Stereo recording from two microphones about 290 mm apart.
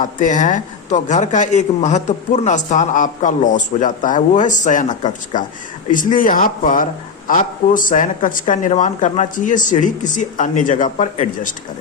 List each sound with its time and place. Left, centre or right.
0.0 s speech: left